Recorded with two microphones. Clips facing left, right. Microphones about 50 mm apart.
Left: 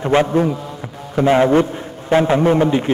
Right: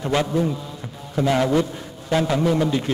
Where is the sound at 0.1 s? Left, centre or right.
Left.